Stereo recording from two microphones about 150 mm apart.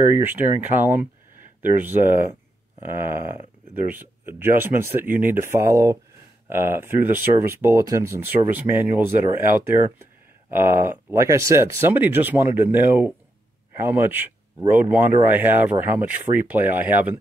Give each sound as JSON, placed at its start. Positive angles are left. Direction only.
{"t": 0.1, "sound": "speech", "side_deg": -15}
{"t": 10.5, "sound": "speech", "side_deg": -15}